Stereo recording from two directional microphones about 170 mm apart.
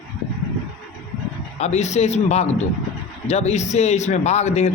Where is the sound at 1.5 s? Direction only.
40° left (ahead or behind).